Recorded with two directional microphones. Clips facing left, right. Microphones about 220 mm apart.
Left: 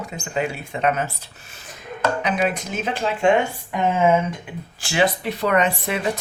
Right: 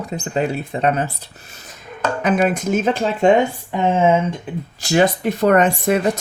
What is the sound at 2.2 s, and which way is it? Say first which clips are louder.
Speech: right 5 dB; 50° right (ahead or behind).